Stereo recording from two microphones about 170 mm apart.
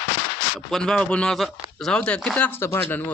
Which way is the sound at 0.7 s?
5° left (ahead or behind).